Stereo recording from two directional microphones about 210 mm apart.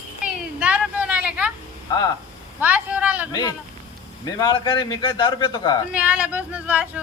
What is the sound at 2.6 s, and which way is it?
Vehicle, 5° right (ahead or behind).